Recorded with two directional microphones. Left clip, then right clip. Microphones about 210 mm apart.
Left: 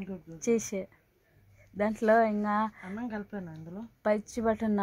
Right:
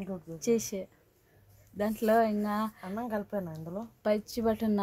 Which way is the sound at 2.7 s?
35° right (ahead or behind).